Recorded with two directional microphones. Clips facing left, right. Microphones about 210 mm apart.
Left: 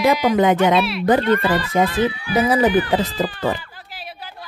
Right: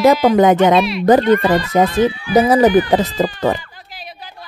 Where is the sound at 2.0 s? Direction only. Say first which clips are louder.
Right 5 dB; 40° right (ahead or behind).